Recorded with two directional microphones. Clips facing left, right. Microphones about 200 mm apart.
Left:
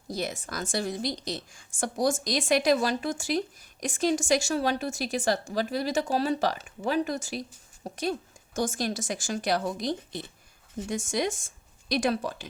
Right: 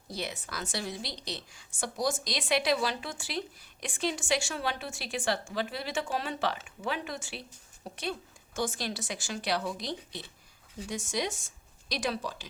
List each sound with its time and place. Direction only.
0.1 s a woman's voice: 45° left (ahead or behind)